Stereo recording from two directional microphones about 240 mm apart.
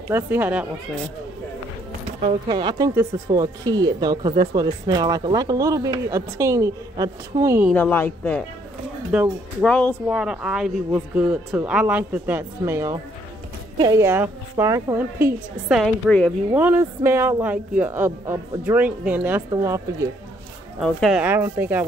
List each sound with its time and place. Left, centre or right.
0.1 s speech: centre
2.2 s speech: centre
7.7 s a woman's voice: centre
9.1 s speech: centre
9.7 s a woman's voice: centre
10.0 s speech: centre
20.8 s speech: centre